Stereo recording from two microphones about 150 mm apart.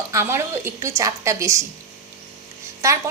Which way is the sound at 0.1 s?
15° right (ahead or behind).